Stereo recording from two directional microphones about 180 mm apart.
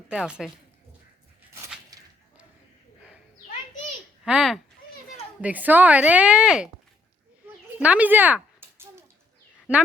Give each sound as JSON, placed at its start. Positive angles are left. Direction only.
{"t": 0.1, "sound": "a woman's voice", "side_deg": -5}
{"t": 1.9, "sound": "whip", "side_deg": -20}
{"t": 4.3, "sound": "a woman's voice", "side_deg": -5}
{"t": 7.8, "sound": "speech", "side_deg": -10}